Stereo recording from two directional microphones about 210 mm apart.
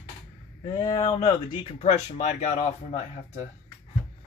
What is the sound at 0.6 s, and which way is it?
Speech, 20° left (ahead or behind).